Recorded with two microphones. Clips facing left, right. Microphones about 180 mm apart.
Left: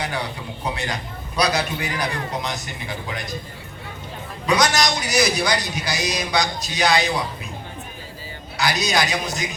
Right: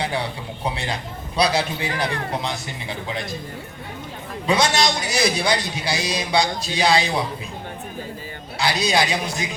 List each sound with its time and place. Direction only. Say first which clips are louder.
0.6 s a man's voice: right 1 dB; 30° right (ahead or behind)
4.4 s a man's voice: even; 25° right (ahead or behind)
8.5 s a man's voice: right 1 dB; 30° right (ahead or behind)